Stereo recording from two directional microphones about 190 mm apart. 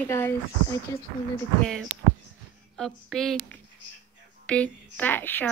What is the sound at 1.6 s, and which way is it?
Speech, centre (ahead or behind).